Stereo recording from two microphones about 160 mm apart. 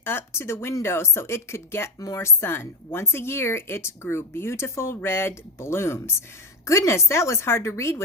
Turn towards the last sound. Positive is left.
turn(degrees=15)  # may be behind; listen again after turning